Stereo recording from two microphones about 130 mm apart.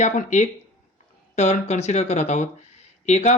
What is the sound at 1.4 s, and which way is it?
Speech, 60° left (ahead or behind).